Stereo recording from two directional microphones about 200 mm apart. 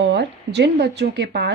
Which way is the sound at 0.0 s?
60° right (ahead or behind).